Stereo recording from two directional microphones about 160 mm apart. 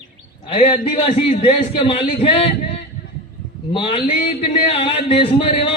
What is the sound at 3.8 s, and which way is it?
A man's voice, 35° left (ahead or behind).